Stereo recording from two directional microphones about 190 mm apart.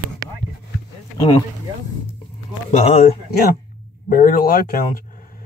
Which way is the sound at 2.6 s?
35° left (ahead or behind).